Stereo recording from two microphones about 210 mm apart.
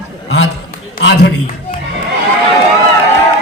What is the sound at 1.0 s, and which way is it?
Speech, 55° left (ahead or behind).